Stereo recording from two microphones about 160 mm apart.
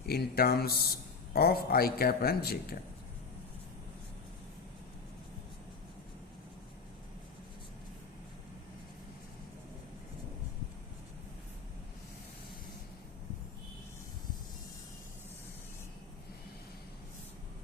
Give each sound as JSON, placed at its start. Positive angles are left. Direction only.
{"t": 0.0, "sound": "a man's voice", "side_deg": 70}